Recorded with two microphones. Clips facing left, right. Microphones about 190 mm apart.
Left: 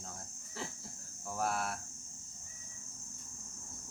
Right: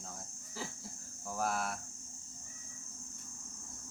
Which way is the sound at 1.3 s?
Centre (ahead or behind).